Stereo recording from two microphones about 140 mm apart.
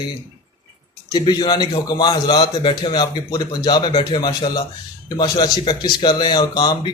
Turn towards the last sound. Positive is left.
turn(degrees=30)  # may be behind; listen again after turning